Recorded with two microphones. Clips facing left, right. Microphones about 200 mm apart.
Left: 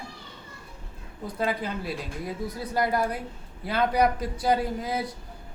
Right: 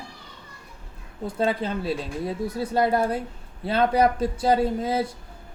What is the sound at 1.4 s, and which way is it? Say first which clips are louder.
A man's voice: right 4 dB; 25° right (ahead or behind).